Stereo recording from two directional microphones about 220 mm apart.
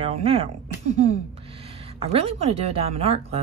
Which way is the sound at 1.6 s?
25° right (ahead or behind).